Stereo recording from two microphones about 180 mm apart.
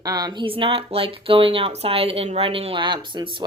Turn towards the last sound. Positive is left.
turn(degrees=-25)  # may be behind; listen again after turning